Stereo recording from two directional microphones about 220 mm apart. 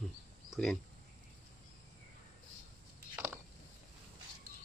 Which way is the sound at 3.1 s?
10° right (ahead or behind).